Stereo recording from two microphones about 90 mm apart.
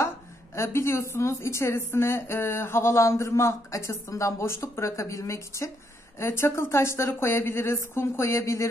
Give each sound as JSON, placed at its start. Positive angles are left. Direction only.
{"t": 0.6, "sound": "speech", "side_deg": 30}